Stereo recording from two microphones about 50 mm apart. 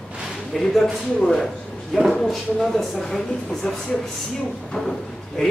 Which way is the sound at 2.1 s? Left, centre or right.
Centre.